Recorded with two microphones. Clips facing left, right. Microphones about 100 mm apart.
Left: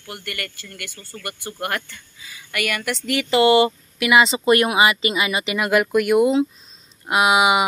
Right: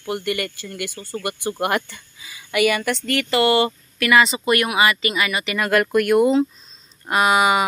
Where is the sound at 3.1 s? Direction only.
15° left (ahead or behind).